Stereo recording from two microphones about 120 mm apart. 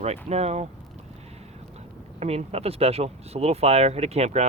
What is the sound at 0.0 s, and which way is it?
Speech, 60° right (ahead or behind).